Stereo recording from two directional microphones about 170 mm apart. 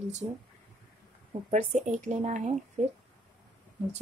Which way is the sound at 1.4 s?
45° right (ahead or behind).